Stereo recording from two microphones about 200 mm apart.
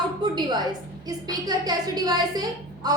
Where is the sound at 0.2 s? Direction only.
20° right (ahead or behind).